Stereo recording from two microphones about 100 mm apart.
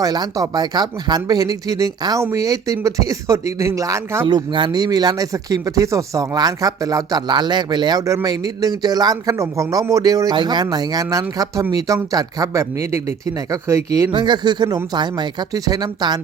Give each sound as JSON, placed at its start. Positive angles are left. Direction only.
{"t": 0.0, "sound": "a man's voice", "side_deg": -40}
{"t": 4.3, "sound": "speech", "side_deg": -50}
{"t": 14.1, "sound": "speech", "side_deg": -50}